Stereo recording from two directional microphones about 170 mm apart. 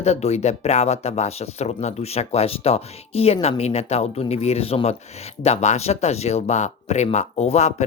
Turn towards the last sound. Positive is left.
turn(degrees=40)  # may be behind; listen again after turning